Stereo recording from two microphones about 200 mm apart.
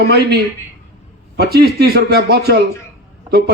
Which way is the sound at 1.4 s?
55° right (ahead or behind).